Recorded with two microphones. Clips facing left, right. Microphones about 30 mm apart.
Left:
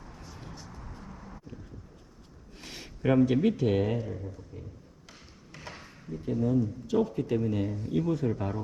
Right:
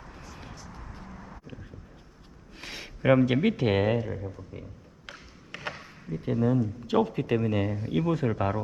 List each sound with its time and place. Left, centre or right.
0.0 s vehicle: right
2.6 s speech: right
5.5 s a sound: right
6.1 s speech: right